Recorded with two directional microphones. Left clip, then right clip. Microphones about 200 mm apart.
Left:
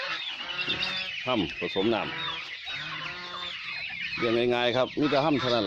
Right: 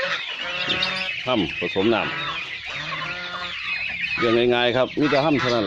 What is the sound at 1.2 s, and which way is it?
Speech, 15° left (ahead or behind).